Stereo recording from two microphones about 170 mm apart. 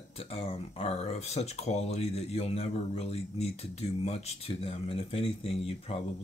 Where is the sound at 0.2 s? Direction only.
35° left (ahead or behind).